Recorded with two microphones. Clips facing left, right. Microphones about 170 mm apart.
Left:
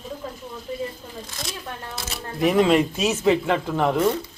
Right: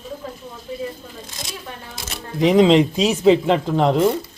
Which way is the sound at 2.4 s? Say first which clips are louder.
Right 4 dB; 20° right (ahead or behind).